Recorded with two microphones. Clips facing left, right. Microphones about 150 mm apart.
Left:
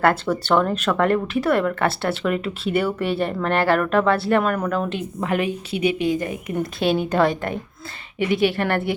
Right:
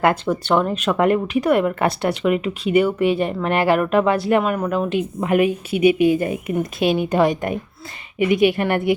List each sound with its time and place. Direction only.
0.0 s speech: 15° right (ahead or behind)
5.7 s a woman's voice: 30° left (ahead or behind)
6.1 s a woman's voice: 25° right (ahead or behind)
6.9 s speech: 5° right (ahead or behind)
8.2 s a woman's voice: centre (ahead or behind)